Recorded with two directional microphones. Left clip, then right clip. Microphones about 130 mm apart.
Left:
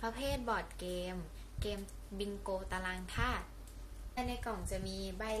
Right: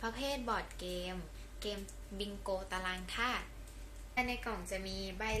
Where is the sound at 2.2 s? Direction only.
25° left (ahead or behind).